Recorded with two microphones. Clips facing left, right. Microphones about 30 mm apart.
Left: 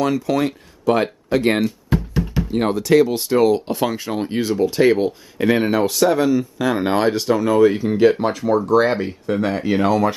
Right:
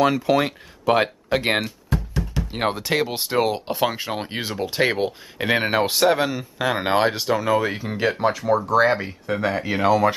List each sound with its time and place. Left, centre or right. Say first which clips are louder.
0.0 s speech: even; right
2.0 s music: left 5 dB; centre
2.5 s speech: left 7 dB; right; by 10.1 s centre